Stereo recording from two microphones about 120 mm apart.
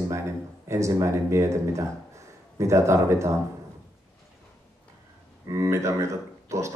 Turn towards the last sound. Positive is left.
turn(degrees=-25)  # may be behind; listen again after turning